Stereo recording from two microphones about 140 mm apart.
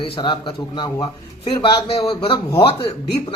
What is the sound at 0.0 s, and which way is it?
Speech, 35° left (ahead or behind).